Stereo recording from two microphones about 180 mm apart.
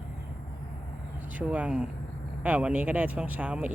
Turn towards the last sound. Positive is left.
turn(degrees=-10)  # may be behind; listen again after turning